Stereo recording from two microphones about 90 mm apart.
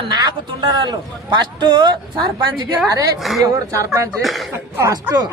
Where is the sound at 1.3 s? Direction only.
60° right (ahead or behind).